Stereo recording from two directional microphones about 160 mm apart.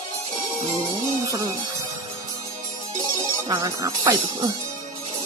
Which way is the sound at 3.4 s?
25° right (ahead or behind).